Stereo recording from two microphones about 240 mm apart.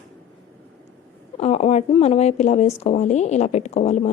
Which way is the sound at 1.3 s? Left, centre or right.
Left.